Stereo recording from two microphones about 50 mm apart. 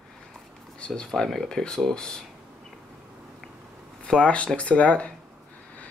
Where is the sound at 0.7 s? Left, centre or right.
Left.